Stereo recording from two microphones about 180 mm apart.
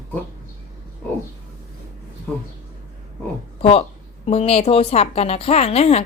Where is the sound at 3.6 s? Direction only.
30° left (ahead or behind).